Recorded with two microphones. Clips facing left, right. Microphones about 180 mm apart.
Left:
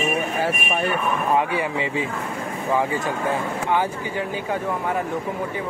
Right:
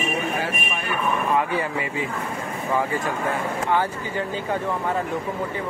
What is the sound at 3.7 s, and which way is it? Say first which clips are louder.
Speech: left 1 dB; 15° left (ahead or behind).